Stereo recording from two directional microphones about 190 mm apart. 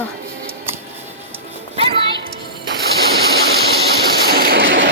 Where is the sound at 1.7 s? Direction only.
30° right (ahead or behind).